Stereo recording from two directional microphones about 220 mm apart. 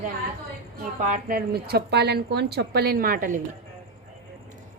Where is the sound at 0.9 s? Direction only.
35° right (ahead or behind).